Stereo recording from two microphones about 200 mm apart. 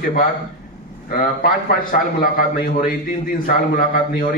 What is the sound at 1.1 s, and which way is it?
A man's voice, 45° left (ahead or behind).